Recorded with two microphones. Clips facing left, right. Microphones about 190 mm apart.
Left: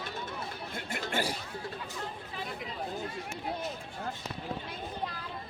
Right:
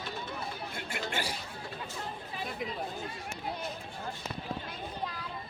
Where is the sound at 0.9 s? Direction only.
45° left (ahead or behind).